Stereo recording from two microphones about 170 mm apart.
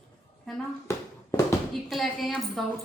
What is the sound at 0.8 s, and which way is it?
Bouncing, 15° left (ahead or behind).